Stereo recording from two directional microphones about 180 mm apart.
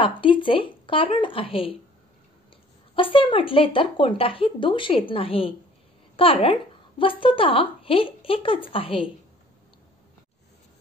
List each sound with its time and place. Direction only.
0.0 s speech: 30° left (ahead or behind)
3.0 s speech: 30° left (ahead or behind)